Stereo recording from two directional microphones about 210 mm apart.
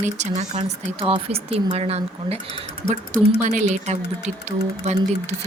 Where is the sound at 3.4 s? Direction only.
35° right (ahead or behind).